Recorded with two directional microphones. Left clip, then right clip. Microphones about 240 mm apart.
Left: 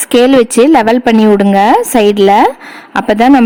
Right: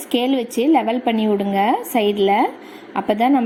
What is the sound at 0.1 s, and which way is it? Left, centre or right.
A woman's voice, left.